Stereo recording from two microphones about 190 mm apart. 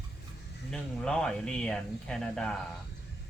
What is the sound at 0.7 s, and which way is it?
Speech, 5° left (ahead or behind).